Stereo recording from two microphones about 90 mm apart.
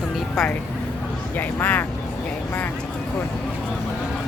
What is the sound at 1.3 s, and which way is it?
Speech, 20° left (ahead or behind).